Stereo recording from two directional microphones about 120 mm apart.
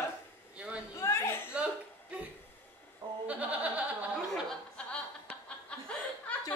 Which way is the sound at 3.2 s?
10° right (ahead or behind).